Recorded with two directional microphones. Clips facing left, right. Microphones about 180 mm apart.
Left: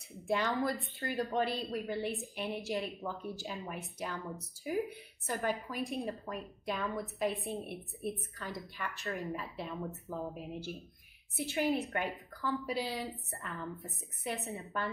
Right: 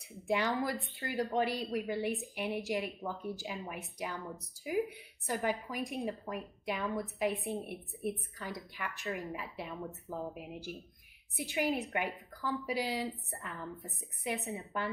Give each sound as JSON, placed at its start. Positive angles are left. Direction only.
{"t": 0.3, "sound": "a woman's voice", "side_deg": -15}